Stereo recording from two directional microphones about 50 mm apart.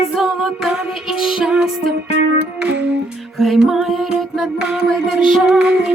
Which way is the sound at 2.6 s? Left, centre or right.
Right.